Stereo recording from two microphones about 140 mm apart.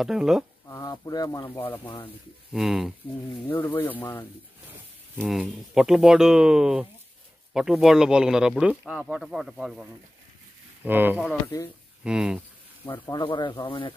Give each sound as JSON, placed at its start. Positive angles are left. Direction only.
{"t": 0.0, "sound": "speech", "side_deg": -5}
{"t": 0.7, "sound": "speech", "side_deg": 25}
{"t": 1.5, "sound": "speech", "side_deg": 15}
{"t": 2.5, "sound": "speech", "side_deg": 0}
{"t": 3.4, "sound": "speech", "side_deg": 15}
{"t": 5.2, "sound": "speech", "side_deg": 0}
{"t": 10.8, "sound": "speech", "side_deg": -15}
{"t": 11.4, "sound": "speech", "side_deg": 20}
{"t": 12.0, "sound": "speech", "side_deg": -5}
{"t": 13.1, "sound": "speech", "side_deg": 35}